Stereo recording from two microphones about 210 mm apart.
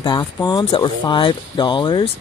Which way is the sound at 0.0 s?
20° left (ahead or behind).